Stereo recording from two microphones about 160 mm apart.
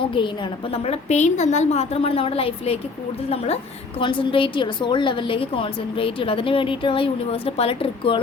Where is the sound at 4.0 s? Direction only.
30° left (ahead or behind).